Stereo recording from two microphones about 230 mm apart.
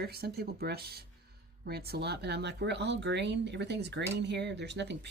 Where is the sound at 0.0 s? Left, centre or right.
Right.